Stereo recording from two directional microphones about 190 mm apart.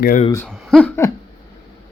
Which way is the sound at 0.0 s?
45° left (ahead or behind).